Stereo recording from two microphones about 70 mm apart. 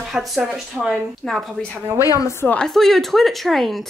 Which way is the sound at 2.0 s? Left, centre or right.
Left.